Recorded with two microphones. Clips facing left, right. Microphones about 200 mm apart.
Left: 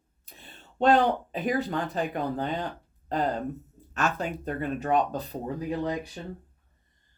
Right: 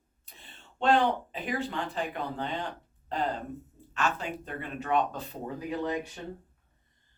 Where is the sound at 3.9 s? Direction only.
40° left (ahead or behind).